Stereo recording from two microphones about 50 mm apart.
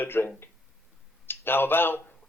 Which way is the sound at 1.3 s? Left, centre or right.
Left.